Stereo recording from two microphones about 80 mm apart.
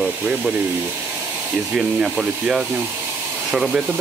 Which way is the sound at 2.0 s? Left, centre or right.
Centre.